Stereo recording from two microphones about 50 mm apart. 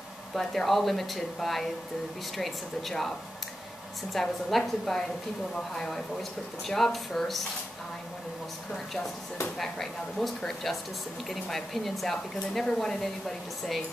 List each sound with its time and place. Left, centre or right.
0.3 s speech: centre
8.7 s speech: centre